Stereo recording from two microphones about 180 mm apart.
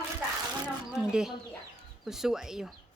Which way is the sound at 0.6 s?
5° right (ahead or behind).